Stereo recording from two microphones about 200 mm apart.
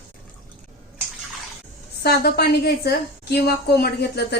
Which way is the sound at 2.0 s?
50° left (ahead or behind).